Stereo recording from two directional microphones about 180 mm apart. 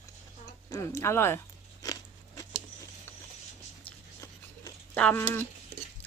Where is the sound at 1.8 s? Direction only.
20° left (ahead or behind).